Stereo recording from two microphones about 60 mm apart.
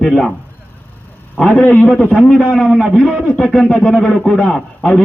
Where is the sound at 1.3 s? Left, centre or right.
Left.